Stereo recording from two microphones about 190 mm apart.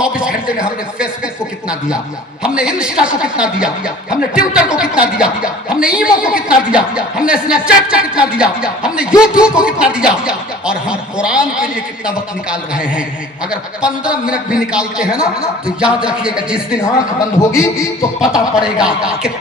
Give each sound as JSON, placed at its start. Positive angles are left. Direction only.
{"t": 0.0, "sound": "a sound", "side_deg": -5}
{"t": 0.6, "sound": "speech", "side_deg": -5}
{"t": 2.4, "sound": "speech", "side_deg": -5}
{"t": 16.8, "sound": "a man's voice", "side_deg": 15}
{"t": 17.7, "sound": "speech", "side_deg": -5}